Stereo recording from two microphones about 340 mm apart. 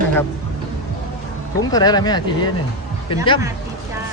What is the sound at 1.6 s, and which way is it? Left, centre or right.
Speech, centre.